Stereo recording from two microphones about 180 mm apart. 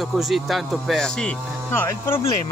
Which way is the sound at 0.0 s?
Centre (ahead or behind).